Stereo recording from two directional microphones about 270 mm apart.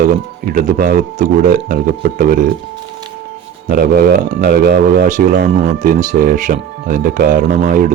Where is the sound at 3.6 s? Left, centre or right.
Right.